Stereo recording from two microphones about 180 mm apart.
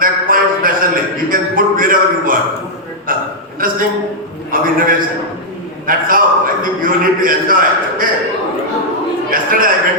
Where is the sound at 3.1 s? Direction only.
50° right (ahead or behind).